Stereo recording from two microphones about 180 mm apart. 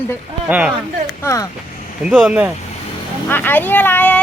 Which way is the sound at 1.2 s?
15° left (ahead or behind).